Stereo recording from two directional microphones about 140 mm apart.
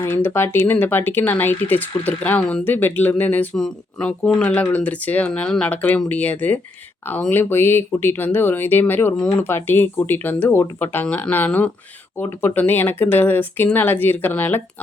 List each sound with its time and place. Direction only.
0.0 s speech: 15° left (ahead or behind)